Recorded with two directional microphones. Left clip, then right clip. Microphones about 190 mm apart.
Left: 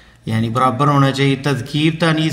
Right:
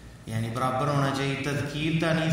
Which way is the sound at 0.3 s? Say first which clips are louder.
Left 12 dB; 35° left (ahead or behind).